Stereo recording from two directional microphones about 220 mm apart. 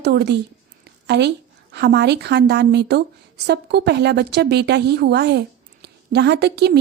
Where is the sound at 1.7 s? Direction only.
50° right (ahead or behind).